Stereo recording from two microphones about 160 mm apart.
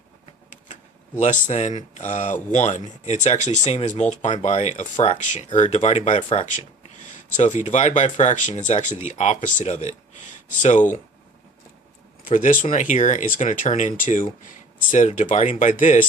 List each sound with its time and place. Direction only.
0.5 s speech: 50° left (ahead or behind)
12.3 s speech: 55° left (ahead or behind)